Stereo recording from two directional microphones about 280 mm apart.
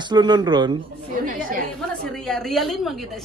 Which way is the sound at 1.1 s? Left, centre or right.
Right.